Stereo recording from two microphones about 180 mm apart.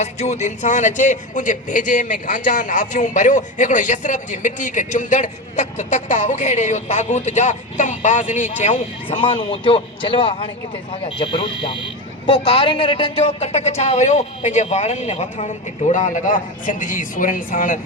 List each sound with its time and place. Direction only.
0.0 s speech: 40° left (ahead or behind)
9.0 s a man's voice: 30° left (ahead or behind); by 17.7 s 50° left (ahead or behind)